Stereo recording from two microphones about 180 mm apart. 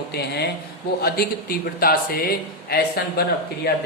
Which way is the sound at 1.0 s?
55° left (ahead or behind).